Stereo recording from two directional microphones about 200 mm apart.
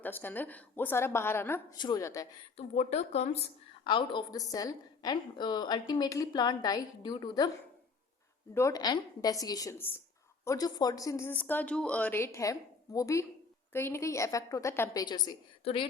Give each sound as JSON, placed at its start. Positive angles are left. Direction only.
{"t": 0.0, "sound": "speech", "side_deg": 10}
{"t": 2.6, "sound": "a woman's voice", "side_deg": 35}
{"t": 8.5, "sound": "speech", "side_deg": 15}